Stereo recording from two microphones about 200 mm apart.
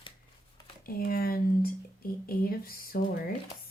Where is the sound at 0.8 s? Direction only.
45° left (ahead or behind).